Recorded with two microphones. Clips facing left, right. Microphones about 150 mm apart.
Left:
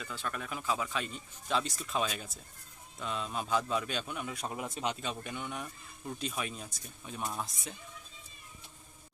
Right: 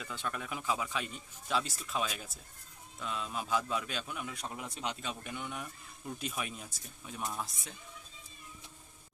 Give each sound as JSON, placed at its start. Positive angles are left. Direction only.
{"t": 0.0, "sound": "a man's voice", "side_deg": -15}
{"t": 4.4, "sound": "speech", "side_deg": 45}
{"t": 4.7, "sound": "a man's voice", "side_deg": 0}